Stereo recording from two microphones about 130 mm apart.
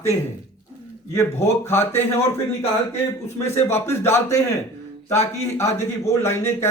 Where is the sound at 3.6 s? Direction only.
20° left (ahead or behind).